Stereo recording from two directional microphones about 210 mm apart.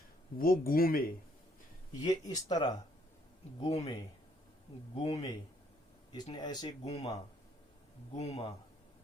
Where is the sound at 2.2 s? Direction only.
20° left (ahead or behind).